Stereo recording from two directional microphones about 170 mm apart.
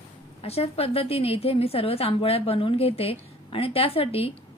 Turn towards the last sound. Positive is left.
turn(degrees=35)  # may be behind; listen again after turning